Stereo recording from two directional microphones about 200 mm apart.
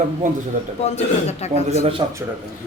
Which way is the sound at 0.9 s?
30° left (ahead or behind).